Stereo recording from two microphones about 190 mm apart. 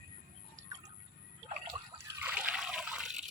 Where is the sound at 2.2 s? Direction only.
5° right (ahead or behind).